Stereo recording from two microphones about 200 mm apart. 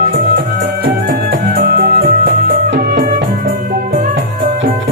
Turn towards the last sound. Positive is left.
turn(degrees=-40)  # may be behind; listen again after turning